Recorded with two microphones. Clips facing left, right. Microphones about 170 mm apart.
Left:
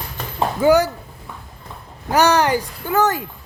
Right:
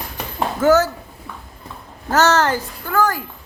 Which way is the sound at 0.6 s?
15° left (ahead or behind).